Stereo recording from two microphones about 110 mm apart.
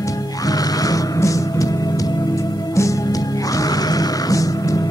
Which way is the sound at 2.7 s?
30° left (ahead or behind).